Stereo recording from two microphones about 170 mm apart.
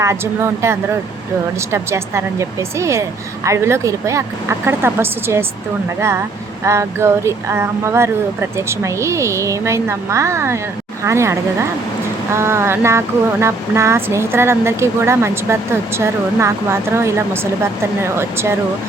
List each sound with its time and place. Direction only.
0.0 s speech: 15° right (ahead or behind)
6.7 s speech: 15° right (ahead or behind)